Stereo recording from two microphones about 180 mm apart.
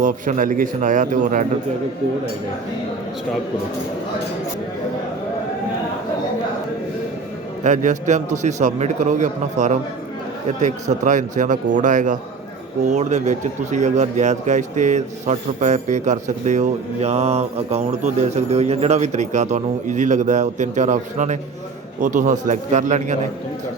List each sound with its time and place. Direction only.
0.0 s speech: 45° right (ahead or behind)
7.6 s a man's voice: 45° right (ahead or behind)
11.0 s a man's voice: 45° right (ahead or behind)